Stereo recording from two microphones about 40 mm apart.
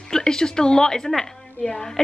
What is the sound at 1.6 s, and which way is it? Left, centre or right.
Speech, left.